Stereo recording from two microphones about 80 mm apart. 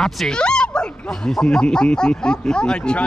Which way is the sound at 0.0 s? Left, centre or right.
Centre.